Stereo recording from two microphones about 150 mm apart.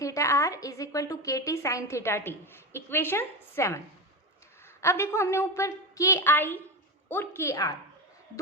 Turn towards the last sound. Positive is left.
turn(degrees=20)  # may be behind; listen again after turning